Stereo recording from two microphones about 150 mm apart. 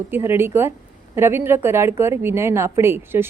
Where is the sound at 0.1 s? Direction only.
15° right (ahead or behind).